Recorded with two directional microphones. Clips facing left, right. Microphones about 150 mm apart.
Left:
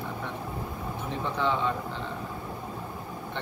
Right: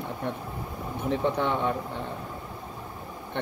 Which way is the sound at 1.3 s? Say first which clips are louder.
Right 1 dB; 55° right (ahead or behind).